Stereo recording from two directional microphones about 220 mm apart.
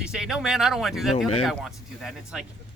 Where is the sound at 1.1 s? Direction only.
25° left (ahead or behind).